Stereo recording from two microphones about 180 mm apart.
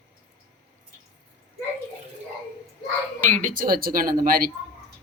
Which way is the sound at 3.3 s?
45° right (ahead or behind).